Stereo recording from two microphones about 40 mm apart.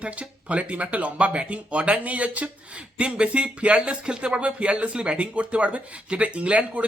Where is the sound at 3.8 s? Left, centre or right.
Right.